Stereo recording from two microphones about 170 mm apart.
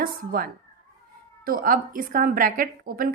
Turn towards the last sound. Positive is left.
turn(degrees=-60)  # may be behind; listen again after turning